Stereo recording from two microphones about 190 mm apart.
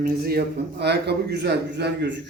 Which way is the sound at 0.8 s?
60° right (ahead or behind).